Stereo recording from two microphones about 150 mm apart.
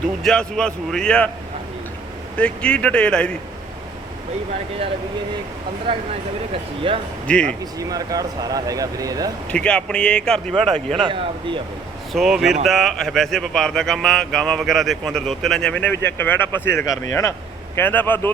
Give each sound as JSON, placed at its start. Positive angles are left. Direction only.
{"t": 0.2, "sound": "speech", "side_deg": 5}
{"t": 2.3, "sound": "speech", "side_deg": 5}
{"t": 5.9, "sound": "speech", "side_deg": -35}
{"t": 7.3, "sound": "speech", "side_deg": 5}
{"t": 7.6, "sound": "speech", "side_deg": -25}
{"t": 9.5, "sound": "speech", "side_deg": 5}
{"t": 10.9, "sound": "speech", "side_deg": -35}
{"t": 12.1, "sound": "speech", "side_deg": -5}